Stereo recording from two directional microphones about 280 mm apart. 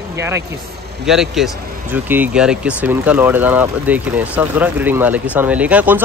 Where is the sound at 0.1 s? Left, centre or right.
Centre.